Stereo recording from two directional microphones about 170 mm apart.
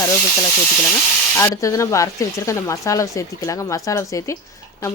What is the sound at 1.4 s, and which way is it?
A woman's voice, 20° left (ahead or behind).